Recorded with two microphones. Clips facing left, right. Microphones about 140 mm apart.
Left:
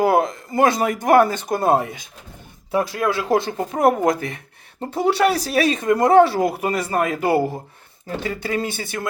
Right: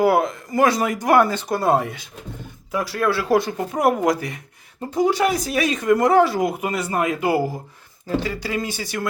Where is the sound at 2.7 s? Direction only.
30° left (ahead or behind).